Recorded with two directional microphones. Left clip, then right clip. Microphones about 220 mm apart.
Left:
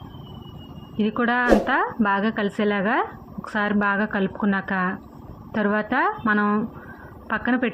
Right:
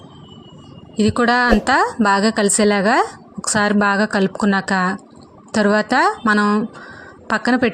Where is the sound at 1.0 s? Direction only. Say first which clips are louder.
Right 7 dB; 55° right (ahead or behind).